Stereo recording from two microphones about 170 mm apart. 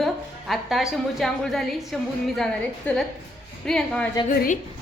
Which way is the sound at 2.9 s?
10° left (ahead or behind).